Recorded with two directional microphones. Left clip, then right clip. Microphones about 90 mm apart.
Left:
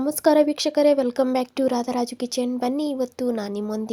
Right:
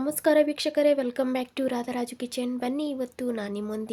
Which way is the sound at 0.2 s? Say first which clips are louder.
Left 4 dB; 40° left (ahead or behind).